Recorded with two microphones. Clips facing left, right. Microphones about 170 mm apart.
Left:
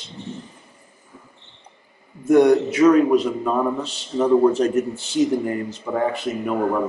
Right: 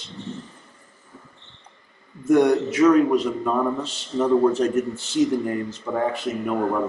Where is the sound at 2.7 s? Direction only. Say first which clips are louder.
Right 1 dB; 10° left (ahead or behind).